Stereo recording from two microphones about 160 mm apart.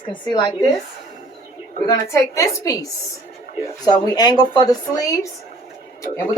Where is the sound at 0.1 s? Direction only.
30° left (ahead or behind).